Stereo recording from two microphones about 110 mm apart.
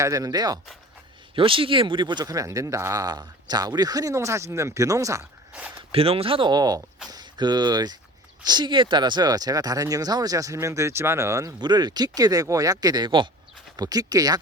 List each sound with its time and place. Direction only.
0.0 s speech: 30° right (ahead or behind)
1.4 s speech: 55° right (ahead or behind); by 5.2 s 30° right (ahead or behind)
5.9 s speech: 60° right (ahead or behind)
6.5 s speech: 35° right (ahead or behind)